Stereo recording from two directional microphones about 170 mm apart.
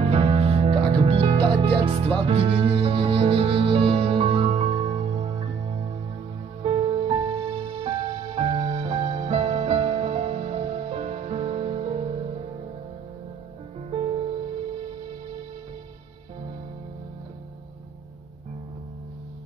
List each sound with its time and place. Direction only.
0.0 s music: 35° right (ahead or behind)
6.6 s music: 30° right (ahead or behind)
13.8 s music: 35° right (ahead or behind)